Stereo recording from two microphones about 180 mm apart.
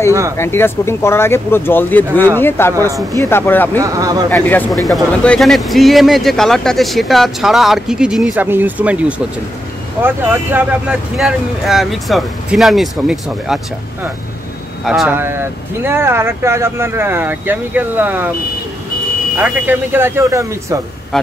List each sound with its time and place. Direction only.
0.4 s speech: 10° left (ahead or behind)
3.8 s speech: 20° right (ahead or behind)
4.3 s speech: 10° left (ahead or behind); by 9.0 s 10° right (ahead or behind)
10.0 s speech: 10° right (ahead or behind)
14.9 s speech: 5° right (ahead or behind)
19.3 s speech: 10° right (ahead or behind)
21.1 s speech: centre (ahead or behind)